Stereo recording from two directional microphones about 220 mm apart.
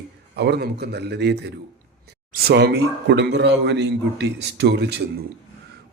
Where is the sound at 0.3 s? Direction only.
50° right (ahead or behind).